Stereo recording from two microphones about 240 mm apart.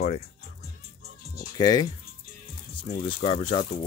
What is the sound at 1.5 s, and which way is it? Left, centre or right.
Speech, centre.